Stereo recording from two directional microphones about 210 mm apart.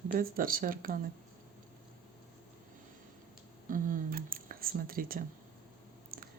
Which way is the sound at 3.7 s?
40° right (ahead or behind).